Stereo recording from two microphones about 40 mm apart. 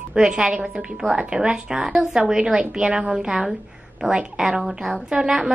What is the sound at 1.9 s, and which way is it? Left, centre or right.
A woman's voice, centre.